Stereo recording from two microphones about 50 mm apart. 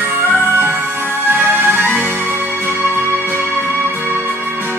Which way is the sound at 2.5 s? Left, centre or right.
Left.